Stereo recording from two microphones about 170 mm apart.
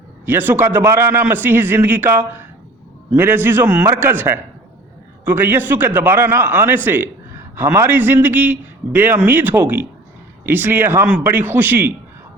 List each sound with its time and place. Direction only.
0.3 s a man's voice: 10° right (ahead or behind)